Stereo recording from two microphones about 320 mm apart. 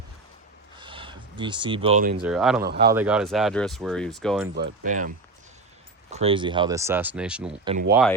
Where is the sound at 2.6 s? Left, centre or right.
Right.